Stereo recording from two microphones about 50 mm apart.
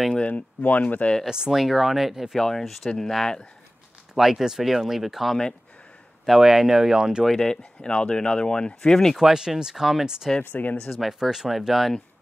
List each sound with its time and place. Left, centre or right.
0.3 s speech: left
1.2 s speech: centre
1.5 s speech: centre
2.3 s speech: centre
4.1 s speech: centre
7.2 s speech: centre
9.1 s speech: centre
10.5 s speech: left
11.0 s speech: centre